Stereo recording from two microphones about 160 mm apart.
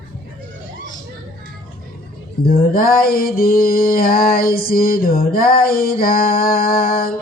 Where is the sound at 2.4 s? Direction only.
65° left (ahead or behind).